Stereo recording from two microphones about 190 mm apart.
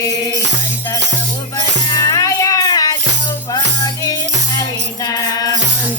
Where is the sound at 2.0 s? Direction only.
20° left (ahead or behind).